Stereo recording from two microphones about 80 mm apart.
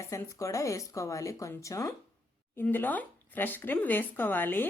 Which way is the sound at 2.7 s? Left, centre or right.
Left.